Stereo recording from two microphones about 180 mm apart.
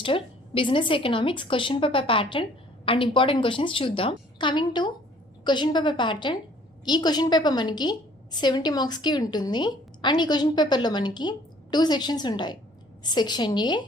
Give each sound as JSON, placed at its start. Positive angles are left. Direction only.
{"t": 0.0, "sound": "a woman's voice", "side_deg": 30}